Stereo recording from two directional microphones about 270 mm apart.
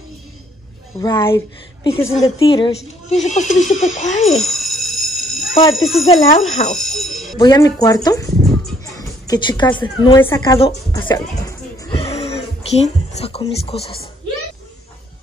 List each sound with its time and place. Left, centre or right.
0.9 s speech: centre
4.3 s a sound: centre
5.5 s speech: centre
5.9 s speech: centre
6.5 s speech: left
6.8 s speech: centre
7.3 s speech: centre
8.9 s music: centre
9.8 s speech: centre
12.1 s music: left
13.7 s speech: left